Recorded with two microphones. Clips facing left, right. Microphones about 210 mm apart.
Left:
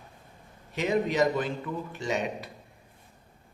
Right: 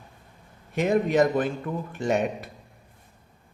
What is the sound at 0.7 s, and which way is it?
Speech, 50° right (ahead or behind).